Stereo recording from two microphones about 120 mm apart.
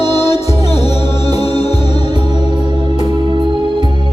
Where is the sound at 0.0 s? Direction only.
60° left (ahead or behind).